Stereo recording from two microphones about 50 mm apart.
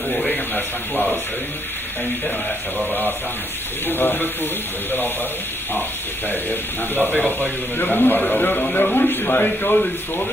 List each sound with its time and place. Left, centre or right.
0.3 s a sound: left
3.8 s speech: left
6.5 s speech: left